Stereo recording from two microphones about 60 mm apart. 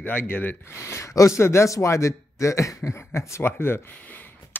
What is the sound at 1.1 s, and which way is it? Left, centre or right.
Speech, left.